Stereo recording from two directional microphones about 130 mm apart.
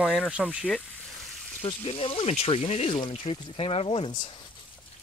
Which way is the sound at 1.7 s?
45° left (ahead or behind).